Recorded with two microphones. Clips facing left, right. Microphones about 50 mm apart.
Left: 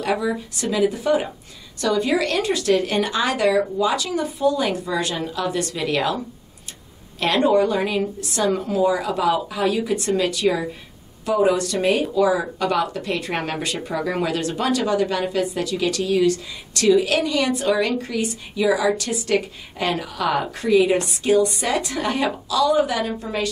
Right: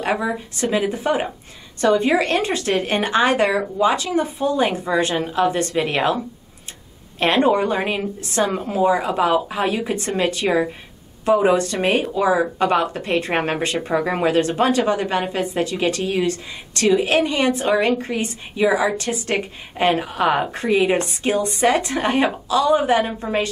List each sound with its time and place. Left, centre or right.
0.0 s speech: right